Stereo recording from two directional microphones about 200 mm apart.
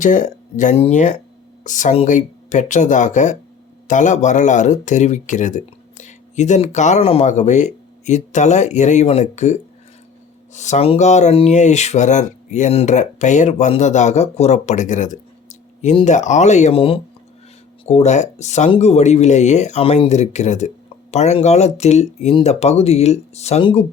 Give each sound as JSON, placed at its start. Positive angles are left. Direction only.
{"t": 0.0, "sound": "speech", "side_deg": 40}